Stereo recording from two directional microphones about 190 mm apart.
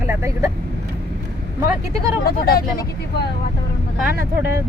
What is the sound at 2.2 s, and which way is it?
Speech, 55° left (ahead or behind).